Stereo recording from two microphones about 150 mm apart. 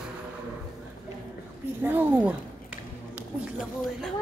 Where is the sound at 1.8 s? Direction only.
15° right (ahead or behind).